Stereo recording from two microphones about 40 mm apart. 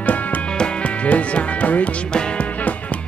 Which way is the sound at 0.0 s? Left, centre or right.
Left.